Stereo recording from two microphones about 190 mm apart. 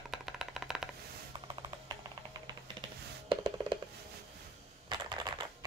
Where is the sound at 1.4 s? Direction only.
20° right (ahead or behind).